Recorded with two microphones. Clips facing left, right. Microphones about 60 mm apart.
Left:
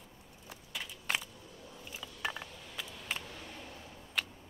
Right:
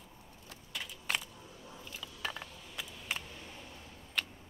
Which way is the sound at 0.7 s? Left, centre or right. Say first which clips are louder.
Left 1 dB; centre.